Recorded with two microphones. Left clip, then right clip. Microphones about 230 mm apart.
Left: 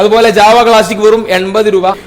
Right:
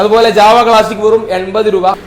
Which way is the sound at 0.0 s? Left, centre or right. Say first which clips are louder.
Left 1 dB; left.